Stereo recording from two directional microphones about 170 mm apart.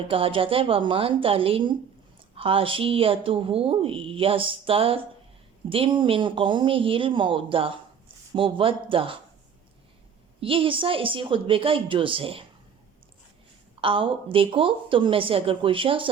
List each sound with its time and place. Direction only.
0.1 s speech: 30° right (ahead or behind)
10.4 s speech: 30° right (ahead or behind)
13.8 s speech: 30° right (ahead or behind)